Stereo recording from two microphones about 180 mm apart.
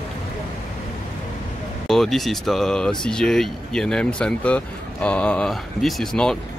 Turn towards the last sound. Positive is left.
turn(degrees=0)  # may be behind; listen again after turning